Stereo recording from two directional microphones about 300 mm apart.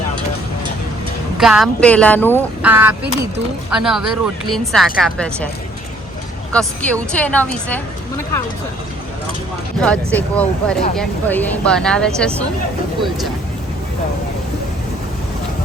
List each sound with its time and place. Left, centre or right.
1.4 s speech: centre
2.6 s speech: centre
6.5 s speech: centre
9.8 s speech: centre